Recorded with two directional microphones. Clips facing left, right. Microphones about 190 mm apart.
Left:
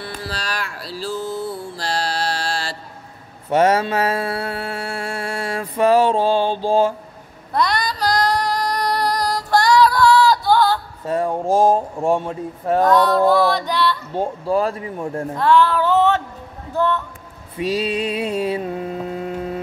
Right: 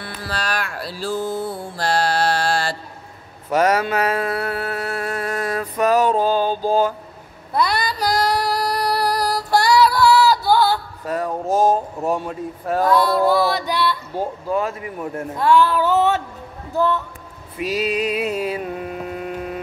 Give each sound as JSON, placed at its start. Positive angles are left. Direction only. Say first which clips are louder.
{"t": 0.0, "sound": "mantra", "louder": "right 1 dB", "side_deg": -55}
{"t": 3.4, "sound": "mantra", "louder": "left 2 dB", "side_deg": 30}
{"t": 7.5, "sound": "female singing", "louder": "even", "side_deg": -5}
{"t": 11.1, "sound": "speech", "louder": "left 3 dB", "side_deg": 25}
{"t": 12.8, "sound": "music", "louder": "left 1 dB", "side_deg": -10}
{"t": 14.1, "sound": "speech", "louder": "left 3 dB", "side_deg": 30}
{"t": 15.3, "sound": "music", "louder": "even", "side_deg": -10}
{"t": 17.6, "sound": "a sound", "louder": "left 1 dB", "side_deg": 30}